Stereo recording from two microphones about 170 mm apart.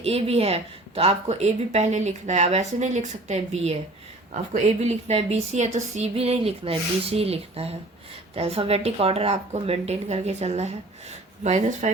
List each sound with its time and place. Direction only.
0.0 s speech: 35° right (ahead or behind)